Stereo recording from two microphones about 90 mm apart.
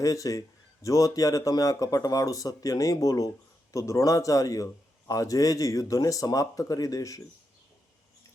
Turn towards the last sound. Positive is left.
turn(degrees=40)  # may be behind; listen again after turning